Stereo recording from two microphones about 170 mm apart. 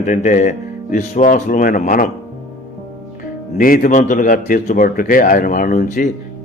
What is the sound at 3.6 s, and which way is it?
A man's voice, 55° left (ahead or behind).